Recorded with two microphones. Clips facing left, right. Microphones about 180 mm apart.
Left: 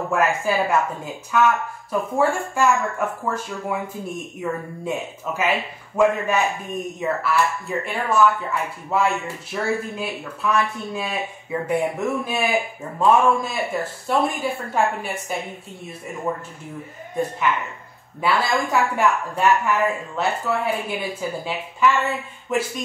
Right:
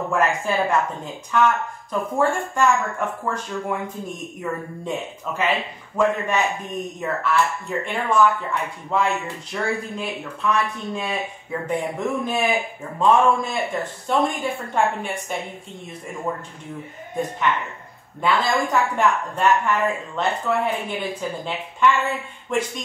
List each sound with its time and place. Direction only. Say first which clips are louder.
0.1 s speech: left 1 dB; 5° left (ahead or behind)
18.2 s speech: even; 5° left (ahead or behind)